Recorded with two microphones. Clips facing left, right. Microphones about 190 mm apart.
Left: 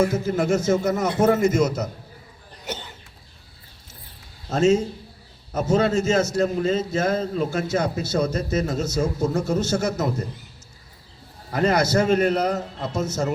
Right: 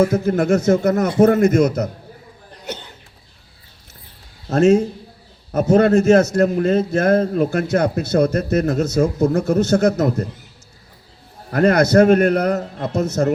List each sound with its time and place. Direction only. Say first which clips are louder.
0.0 s a man's voice: right 5 dB; 55° right (ahead or behind)
4.4 s a man's voice: right 5 dB; 60° right (ahead or behind)
11.5 s a man's voice: right 7 dB; 55° right (ahead or behind)